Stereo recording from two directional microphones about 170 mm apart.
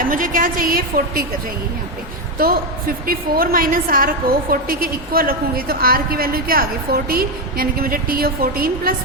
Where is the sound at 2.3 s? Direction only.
60° right (ahead or behind).